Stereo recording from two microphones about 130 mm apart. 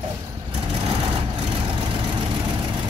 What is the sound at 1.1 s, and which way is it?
Vehicle, 45° right (ahead or behind).